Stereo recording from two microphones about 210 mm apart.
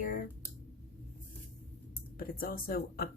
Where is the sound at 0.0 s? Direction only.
40° left (ahead or behind).